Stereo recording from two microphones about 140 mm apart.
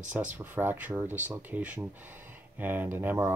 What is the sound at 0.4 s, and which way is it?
Speech, 15° right (ahead or behind).